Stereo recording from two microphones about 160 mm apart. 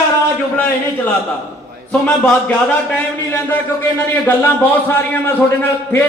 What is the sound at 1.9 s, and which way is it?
A man's voice, 5° left (ahead or behind).